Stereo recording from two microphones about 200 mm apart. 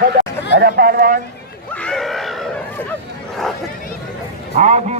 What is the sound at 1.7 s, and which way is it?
Screaming, 5° left (ahead or behind).